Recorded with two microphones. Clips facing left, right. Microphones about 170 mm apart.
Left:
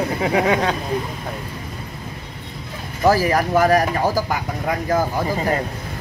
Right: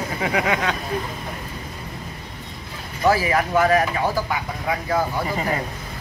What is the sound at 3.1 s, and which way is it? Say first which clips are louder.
Speech: left 3 dB; 40° left (ahead or behind).